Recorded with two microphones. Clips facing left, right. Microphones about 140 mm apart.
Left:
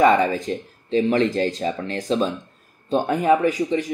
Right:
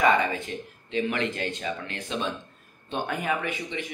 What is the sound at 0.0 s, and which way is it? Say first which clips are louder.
Speech: left 6 dB; 35° left (ahead or behind).